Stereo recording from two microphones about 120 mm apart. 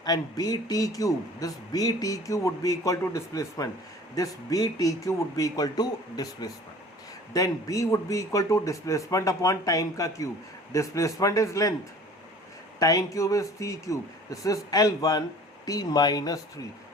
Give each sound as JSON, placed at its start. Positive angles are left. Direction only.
{"t": 0.0, "sound": "speech", "side_deg": 35}
{"t": 12.8, "sound": "speech", "side_deg": 30}